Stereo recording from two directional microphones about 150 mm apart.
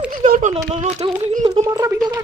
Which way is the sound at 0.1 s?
65° right (ahead or behind).